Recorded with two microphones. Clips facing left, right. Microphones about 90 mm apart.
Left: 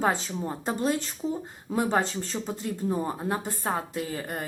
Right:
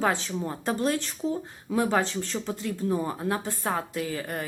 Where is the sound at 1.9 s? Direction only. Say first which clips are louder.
Even; 40° left (ahead or behind).